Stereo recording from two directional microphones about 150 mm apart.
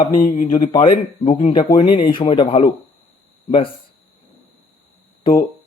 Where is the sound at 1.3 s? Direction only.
40° left (ahead or behind).